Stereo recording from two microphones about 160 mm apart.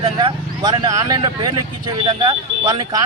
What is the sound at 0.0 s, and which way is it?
Speech, 30° right (ahead or behind).